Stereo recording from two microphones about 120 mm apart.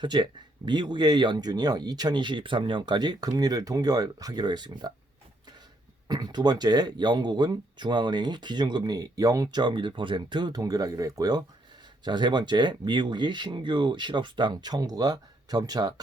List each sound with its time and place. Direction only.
0.0 s speech: 40° right (ahead or behind)
6.1 s speech: 35° right (ahead or behind)